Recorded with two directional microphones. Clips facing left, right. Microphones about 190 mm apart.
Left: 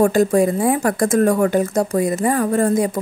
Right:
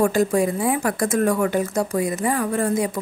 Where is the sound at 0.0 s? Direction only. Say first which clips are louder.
Left 4 dB; 45° left (ahead or behind).